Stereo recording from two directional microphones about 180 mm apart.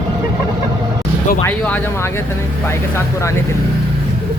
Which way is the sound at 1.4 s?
10° left (ahead or behind).